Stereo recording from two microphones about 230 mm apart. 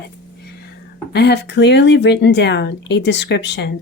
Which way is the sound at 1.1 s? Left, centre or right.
Left.